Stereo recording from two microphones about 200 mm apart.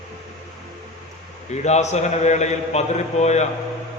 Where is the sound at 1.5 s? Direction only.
35° left (ahead or behind).